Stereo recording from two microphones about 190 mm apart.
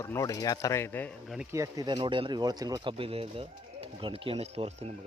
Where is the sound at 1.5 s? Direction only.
20° right (ahead or behind).